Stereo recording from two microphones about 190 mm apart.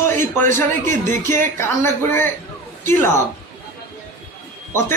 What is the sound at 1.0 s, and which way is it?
Speech, 45° right (ahead or behind).